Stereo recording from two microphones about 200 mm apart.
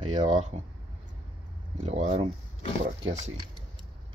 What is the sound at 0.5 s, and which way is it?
Speech, 35° right (ahead or behind).